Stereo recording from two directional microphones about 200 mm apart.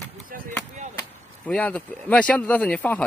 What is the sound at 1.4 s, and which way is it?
Speech, 5° left (ahead or behind).